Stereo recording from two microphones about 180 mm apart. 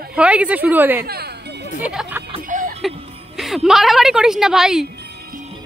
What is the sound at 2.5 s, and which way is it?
Music, 45° right (ahead or behind).